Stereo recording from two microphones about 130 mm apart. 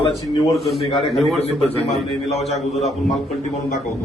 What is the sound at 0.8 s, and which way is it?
Speech, 40° left (ahead or behind).